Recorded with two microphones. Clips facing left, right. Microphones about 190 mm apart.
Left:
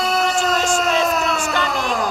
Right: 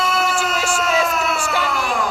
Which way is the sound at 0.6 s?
10° right (ahead or behind).